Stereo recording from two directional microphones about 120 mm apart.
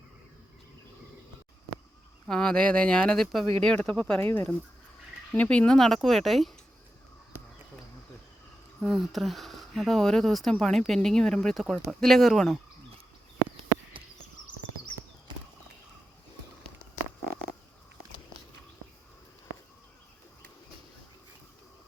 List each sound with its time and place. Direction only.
2.2 s speech: 5° left (ahead or behind)
4.2 s speech: 20° left (ahead or behind); by 6.5 s centre (ahead or behind)
8.8 s speech: centre (ahead or behind)